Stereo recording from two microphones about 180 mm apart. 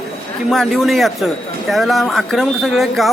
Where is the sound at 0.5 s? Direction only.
Centre (ahead or behind).